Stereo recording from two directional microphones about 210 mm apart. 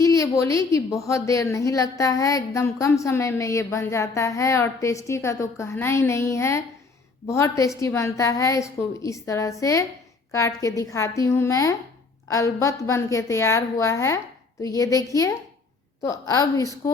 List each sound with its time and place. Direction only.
0.0 s a woman's voice: 15° left (ahead or behind)